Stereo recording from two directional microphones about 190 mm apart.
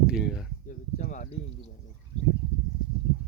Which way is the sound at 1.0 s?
45° left (ahead or behind).